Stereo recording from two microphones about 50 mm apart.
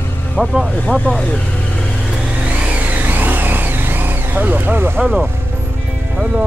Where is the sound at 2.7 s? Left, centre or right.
Right.